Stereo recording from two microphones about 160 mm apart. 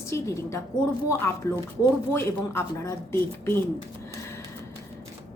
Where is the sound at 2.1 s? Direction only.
15° left (ahead or behind).